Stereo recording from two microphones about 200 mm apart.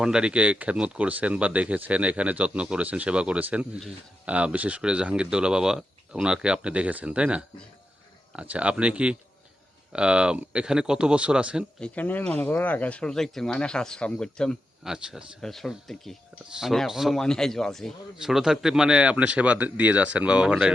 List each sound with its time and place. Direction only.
0.0 s speech: 5° right (ahead or behind)
11.8 s speech: 10° left (ahead or behind)